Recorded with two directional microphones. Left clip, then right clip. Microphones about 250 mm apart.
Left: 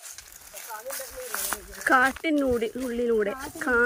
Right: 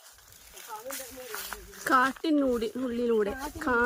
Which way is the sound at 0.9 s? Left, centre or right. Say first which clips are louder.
Left 5 dB; centre.